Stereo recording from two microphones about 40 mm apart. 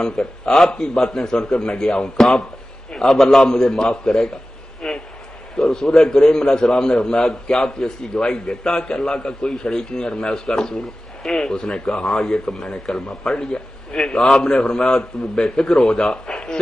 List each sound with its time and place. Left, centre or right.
0.0 s a man's voice: centre
2.9 s a man's voice: centre
3.4 s a man's voice: centre